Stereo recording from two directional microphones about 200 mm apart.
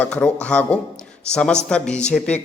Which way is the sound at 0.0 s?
5° left (ahead or behind).